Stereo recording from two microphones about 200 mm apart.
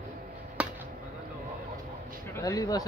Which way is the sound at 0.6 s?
5° right (ahead or behind).